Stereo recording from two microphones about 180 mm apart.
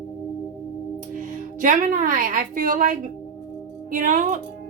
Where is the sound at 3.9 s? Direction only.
45° right (ahead or behind).